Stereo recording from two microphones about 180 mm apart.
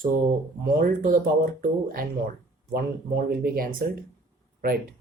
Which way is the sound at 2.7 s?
55° right (ahead or behind).